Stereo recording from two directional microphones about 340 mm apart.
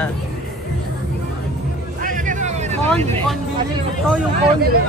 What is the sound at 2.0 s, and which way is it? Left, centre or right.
Music, right.